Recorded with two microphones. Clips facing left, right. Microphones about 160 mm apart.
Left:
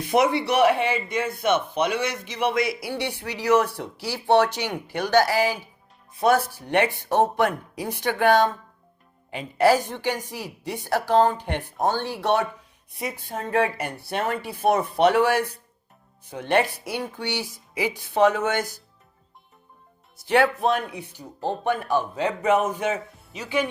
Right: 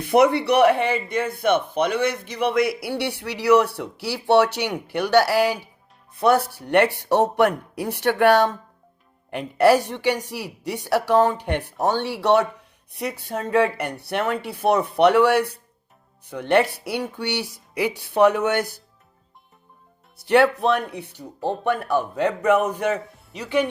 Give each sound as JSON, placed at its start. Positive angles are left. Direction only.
{"t": 0.0, "sound": "speech", "side_deg": -60}
{"t": 20.1, "sound": "speech", "side_deg": -65}